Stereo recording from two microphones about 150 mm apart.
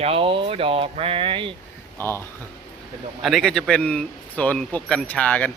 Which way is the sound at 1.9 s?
15° left (ahead or behind).